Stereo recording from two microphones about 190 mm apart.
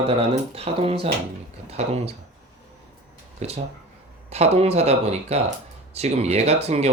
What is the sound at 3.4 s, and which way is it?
Speech, 35° right (ahead or behind).